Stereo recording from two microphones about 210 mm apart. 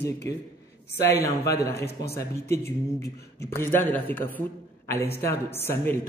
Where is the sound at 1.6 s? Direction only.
50° left (ahead or behind).